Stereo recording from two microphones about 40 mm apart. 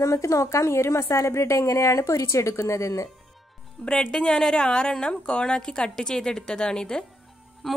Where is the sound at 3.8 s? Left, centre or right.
Left.